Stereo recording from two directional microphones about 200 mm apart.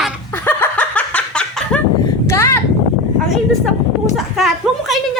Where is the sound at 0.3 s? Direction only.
10° left (ahead or behind).